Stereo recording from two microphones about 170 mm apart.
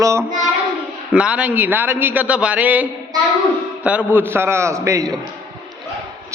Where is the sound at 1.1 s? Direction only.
5° right (ahead or behind).